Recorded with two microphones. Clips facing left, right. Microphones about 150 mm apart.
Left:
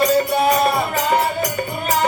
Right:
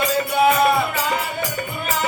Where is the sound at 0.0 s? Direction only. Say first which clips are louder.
Left 2 dB; 40° left (ahead or behind).